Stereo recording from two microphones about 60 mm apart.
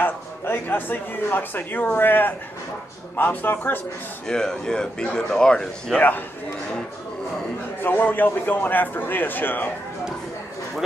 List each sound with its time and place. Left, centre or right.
0.0 s speech: left
4.3 s speech: centre
7.8 s speech: left